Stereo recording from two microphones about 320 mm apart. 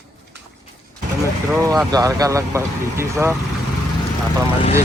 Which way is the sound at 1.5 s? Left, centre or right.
Centre.